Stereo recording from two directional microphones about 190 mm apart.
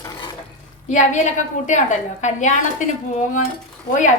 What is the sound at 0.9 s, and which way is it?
A woman's voice, 40° left (ahead or behind).